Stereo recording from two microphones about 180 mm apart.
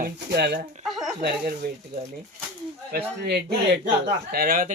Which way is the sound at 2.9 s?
60° right (ahead or behind).